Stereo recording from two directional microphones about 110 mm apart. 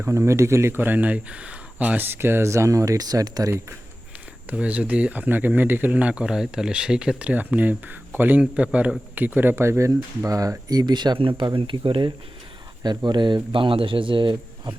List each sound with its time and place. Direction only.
0.0 s speech: 25° right (ahead or behind)
4.4 s speech: 10° right (ahead or behind); by 14.8 s 50° right (ahead or behind)